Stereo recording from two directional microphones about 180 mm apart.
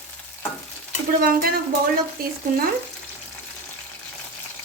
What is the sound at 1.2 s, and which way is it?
Speech, 55° right (ahead or behind).